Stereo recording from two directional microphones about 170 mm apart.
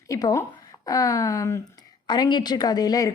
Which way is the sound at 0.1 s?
20° left (ahead or behind).